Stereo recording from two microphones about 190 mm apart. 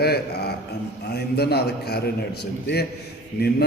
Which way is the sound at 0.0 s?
55° left (ahead or behind).